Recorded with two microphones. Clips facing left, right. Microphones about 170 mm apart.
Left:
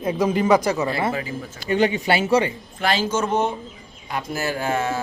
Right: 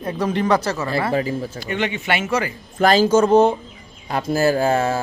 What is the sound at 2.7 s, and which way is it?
Speech, 40° right (ahead or behind).